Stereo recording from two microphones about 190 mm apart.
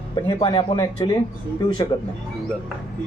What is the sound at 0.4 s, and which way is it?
Speech, 25° left (ahead or behind).